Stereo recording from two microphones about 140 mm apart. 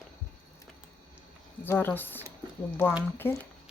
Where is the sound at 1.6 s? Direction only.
15° left (ahead or behind).